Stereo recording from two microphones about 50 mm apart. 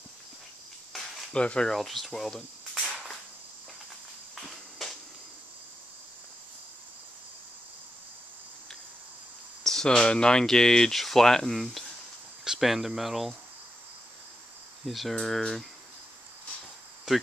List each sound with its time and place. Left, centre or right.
1.3 s speech: left
1.7 s speech: centre
4.4 s a sound: centre
9.6 s speech: centre
14.9 s speech: centre
17.1 s speech: centre